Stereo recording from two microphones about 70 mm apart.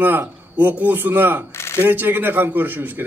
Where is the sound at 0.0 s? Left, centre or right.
Right.